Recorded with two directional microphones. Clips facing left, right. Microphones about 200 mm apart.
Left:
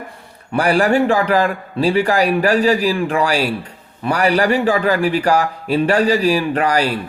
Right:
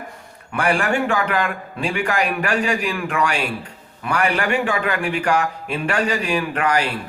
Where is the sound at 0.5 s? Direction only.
35° left (ahead or behind).